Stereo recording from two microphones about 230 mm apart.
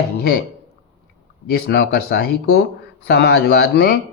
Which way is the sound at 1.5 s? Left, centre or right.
Left.